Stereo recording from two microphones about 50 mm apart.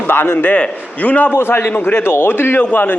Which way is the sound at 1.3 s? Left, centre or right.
Left.